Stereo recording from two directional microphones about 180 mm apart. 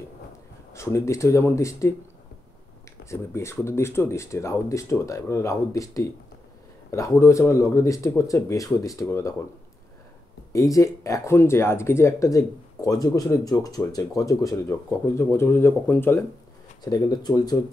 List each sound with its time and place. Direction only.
0.7 s speech: 15° left (ahead or behind)
3.1 s speech: 15° left (ahead or behind)
10.5 s speech: 20° left (ahead or behind)